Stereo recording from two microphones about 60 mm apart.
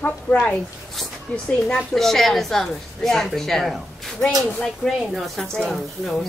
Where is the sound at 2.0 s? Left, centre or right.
Centre.